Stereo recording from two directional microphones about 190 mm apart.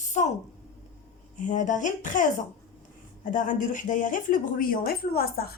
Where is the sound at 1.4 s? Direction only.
40° left (ahead or behind).